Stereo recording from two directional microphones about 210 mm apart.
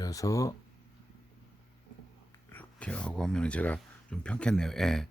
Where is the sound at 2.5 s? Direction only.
5° left (ahead or behind).